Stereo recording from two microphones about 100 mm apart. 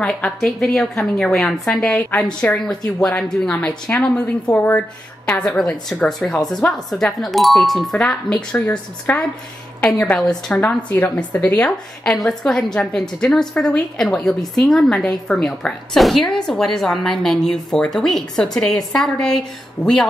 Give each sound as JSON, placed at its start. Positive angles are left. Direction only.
{"t": 0.0, "sound": "a woman's voice", "side_deg": 10}